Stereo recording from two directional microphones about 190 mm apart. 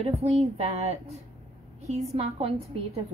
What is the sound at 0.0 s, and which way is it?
A woman's voice, 35° right (ahead or behind).